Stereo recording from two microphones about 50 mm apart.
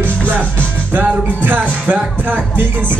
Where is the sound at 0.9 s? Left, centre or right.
Right.